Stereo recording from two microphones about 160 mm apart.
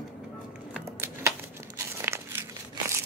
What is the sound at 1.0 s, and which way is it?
Crumpling, 15° right (ahead or behind).